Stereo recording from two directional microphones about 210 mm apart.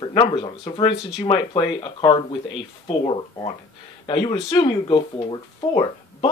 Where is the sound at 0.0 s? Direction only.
20° left (ahead or behind).